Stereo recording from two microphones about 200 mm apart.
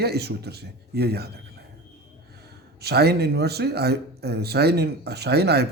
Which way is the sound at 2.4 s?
55° right (ahead or behind).